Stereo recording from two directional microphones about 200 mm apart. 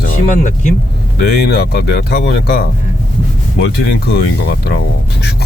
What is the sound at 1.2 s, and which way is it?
Speech, 55° left (ahead or behind).